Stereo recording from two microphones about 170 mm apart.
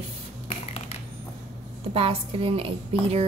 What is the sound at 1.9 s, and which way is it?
A woman's voice, 35° right (ahead or behind).